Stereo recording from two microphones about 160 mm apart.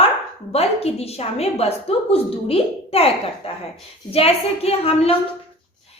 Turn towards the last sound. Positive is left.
turn(degrees=40)  # may be behind; listen again after turning